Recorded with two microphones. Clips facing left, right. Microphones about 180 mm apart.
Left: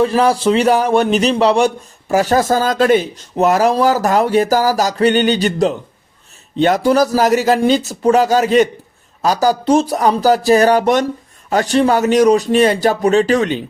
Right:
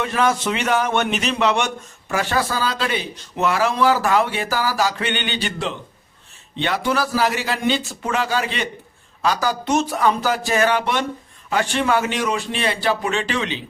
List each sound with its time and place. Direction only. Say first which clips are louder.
0.0 s speech: left 7 dB; 35° left (ahead or behind)